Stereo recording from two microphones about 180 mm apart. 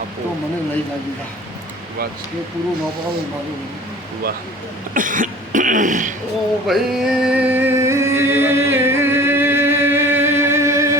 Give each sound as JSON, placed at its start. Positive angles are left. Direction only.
{"t": 4.9, "sound": "throat clearing", "side_deg": -45}
{"t": 6.7, "sound": "music", "side_deg": -5}